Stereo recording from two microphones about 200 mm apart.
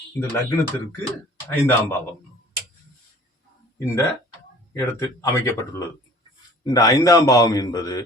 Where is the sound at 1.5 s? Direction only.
15° left (ahead or behind).